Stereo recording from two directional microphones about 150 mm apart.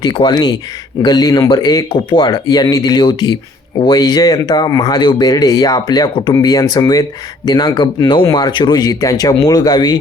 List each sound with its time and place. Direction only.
0.0 s speech: 30° left (ahead or behind)